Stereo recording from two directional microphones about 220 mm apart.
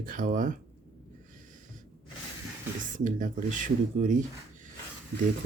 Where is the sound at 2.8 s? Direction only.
35° right (ahead or behind).